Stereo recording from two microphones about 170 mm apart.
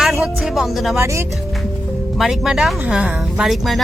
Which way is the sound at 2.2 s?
Centre (ahead or behind).